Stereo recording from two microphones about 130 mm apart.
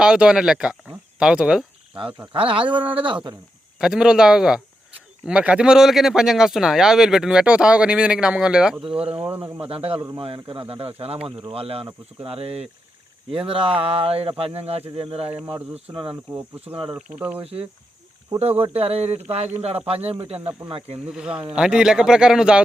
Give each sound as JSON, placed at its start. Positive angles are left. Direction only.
{"t": 0.0, "sound": "speech", "side_deg": -5}
{"t": 2.0, "sound": "speech", "side_deg": -40}
{"t": 3.8, "sound": "speech", "side_deg": -5}
{"t": 8.8, "sound": "speech", "side_deg": -45}
{"t": 17.2, "sound": "speech", "side_deg": -15}
{"t": 18.6, "sound": "speech", "side_deg": -50}
{"t": 21.1, "sound": "speech", "side_deg": -5}